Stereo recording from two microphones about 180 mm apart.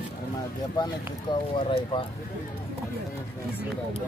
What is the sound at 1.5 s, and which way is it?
Speech, 25° left (ahead or behind).